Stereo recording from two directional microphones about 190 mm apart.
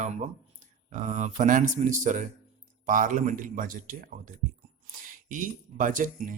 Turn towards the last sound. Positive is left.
turn(degrees=-45)  # may be behind; listen again after turning